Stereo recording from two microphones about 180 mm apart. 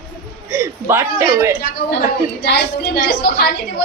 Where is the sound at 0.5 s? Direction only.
15° right (ahead or behind).